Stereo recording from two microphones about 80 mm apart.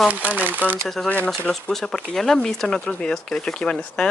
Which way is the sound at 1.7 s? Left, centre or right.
Centre.